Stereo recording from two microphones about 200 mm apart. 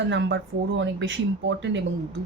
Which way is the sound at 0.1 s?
65° right (ahead or behind).